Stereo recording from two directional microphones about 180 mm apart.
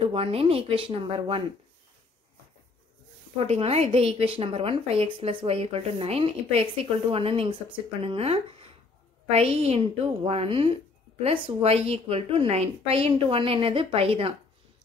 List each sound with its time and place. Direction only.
0.0 s a woman's voice: 30° right (ahead or behind)
3.3 s a woman's voice: 35° right (ahead or behind)